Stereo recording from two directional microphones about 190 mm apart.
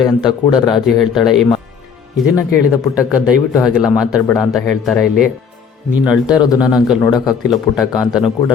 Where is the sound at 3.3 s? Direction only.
Centre (ahead or behind).